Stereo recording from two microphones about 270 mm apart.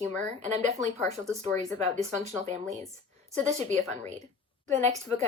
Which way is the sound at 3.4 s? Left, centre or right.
Right.